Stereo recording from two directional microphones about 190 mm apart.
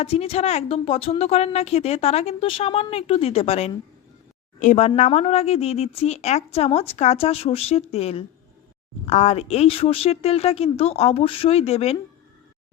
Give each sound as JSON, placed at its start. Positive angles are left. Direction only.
{"t": 0.0, "sound": "a woman's voice", "side_deg": 30}